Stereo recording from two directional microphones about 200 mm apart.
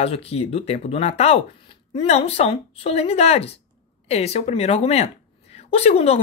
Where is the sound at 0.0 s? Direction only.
30° left (ahead or behind).